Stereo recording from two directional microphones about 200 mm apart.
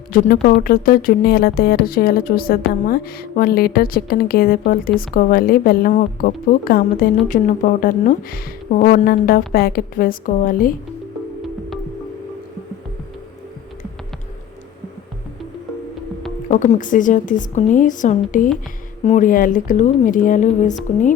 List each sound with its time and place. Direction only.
0.1 s speech: 45° left (ahead or behind)
16.5 s a woman's voice: 40° left (ahead or behind)